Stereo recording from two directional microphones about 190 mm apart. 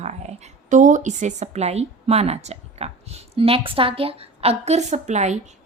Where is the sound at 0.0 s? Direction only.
35° right (ahead or behind).